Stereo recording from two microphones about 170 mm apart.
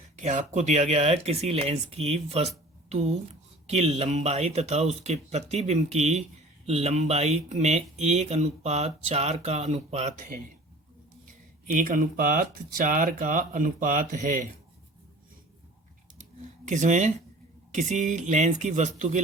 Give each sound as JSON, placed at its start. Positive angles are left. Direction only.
{"t": 0.2, "sound": "speech", "side_deg": -45}
{"t": 11.7, "sound": "speech", "side_deg": -50}
{"t": 16.6, "sound": "speech", "side_deg": -45}